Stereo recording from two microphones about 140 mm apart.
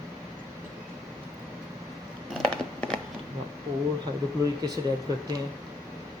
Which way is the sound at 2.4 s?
5° left (ahead or behind).